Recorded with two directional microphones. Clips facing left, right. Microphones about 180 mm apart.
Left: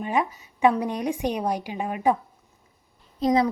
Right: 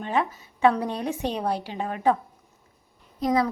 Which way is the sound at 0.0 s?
10° left (ahead or behind).